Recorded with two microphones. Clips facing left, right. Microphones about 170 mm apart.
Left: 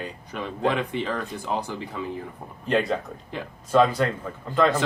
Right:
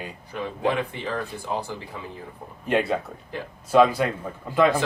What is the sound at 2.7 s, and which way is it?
Speech, 5° right (ahead or behind).